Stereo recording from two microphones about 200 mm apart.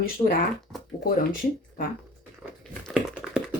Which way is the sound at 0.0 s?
45° left (ahead or behind).